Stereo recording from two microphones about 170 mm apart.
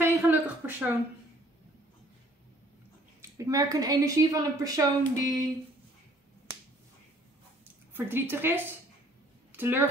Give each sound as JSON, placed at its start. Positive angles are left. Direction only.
{"t": 0.0, "sound": "a sound", "side_deg": -10}
{"t": 3.2, "sound": "a woman's voice", "side_deg": -20}
{"t": 7.9, "sound": "a woman's voice", "side_deg": -15}